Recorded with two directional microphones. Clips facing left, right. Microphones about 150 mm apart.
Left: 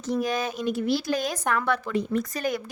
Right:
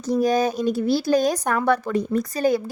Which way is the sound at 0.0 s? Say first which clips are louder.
Right 7 dB; 35° right (ahead or behind).